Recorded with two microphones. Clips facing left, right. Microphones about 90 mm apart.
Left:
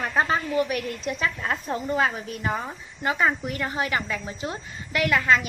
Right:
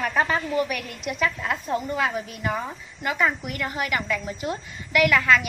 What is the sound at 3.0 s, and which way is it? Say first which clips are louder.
A woman's voice: left 1 dB; 30° left (ahead or behind).